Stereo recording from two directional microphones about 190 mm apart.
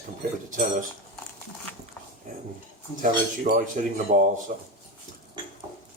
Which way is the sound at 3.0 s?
45° right (ahead or behind).